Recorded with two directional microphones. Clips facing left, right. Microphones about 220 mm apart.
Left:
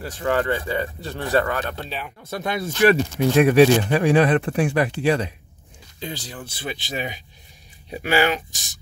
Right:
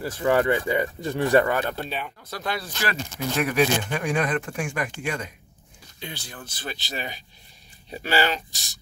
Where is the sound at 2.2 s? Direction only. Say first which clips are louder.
Left 8 dB; 20° left (ahead or behind).